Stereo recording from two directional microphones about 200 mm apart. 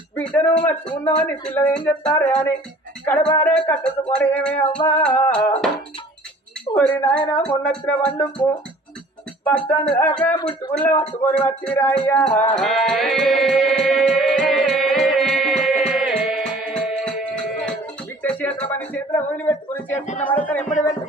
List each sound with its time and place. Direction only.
0.1 s speech: 5° left (ahead or behind)
3.4 s speech: 5° left (ahead or behind)
6.7 s a woman's voice: 5° left (ahead or behind)
9.4 s speech: 10° left (ahead or behind)
12.6 s music: centre (ahead or behind)
18.2 s a sound: 10° left (ahead or behind)
19.9 s speech: 35° left (ahead or behind)
20.2 s speech: 5° left (ahead or behind)